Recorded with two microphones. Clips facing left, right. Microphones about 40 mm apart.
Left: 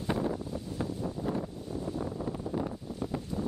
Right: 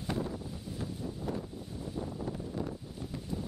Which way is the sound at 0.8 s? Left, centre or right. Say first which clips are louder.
Left 5 dB; centre.